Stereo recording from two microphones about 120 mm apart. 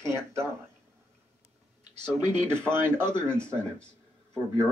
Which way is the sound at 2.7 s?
20° right (ahead or behind).